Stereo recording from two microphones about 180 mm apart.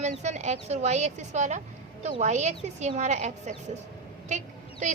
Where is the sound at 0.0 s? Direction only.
40° right (ahead or behind).